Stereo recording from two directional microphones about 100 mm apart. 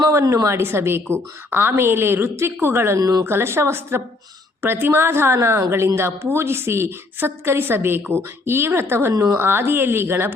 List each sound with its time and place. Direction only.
0.1 s a woman's voice: 30° right (ahead or behind)
3.2 s a woman's voice: 25° right (ahead or behind)